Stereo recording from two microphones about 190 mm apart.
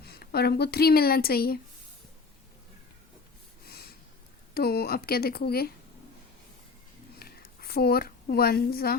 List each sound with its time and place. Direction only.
0.0 s speech: 55° left (ahead or behind)
3.7 s snort: 55° left (ahead or behind)
4.5 s speech: 55° left (ahead or behind)
7.2 s a sound: 55° left (ahead or behind)